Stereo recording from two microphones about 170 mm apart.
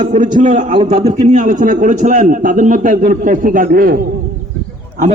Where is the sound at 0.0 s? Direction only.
50° right (ahead or behind).